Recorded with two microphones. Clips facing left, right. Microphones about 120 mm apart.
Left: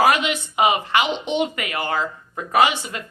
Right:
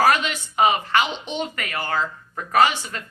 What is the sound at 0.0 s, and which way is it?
A woman's voice, 15° left (ahead or behind).